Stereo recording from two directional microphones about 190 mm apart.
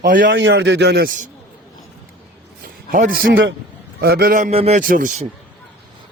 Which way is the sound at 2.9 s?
50° right (ahead or behind).